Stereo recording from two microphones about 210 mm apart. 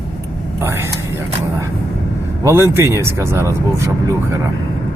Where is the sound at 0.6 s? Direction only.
10° right (ahead or behind).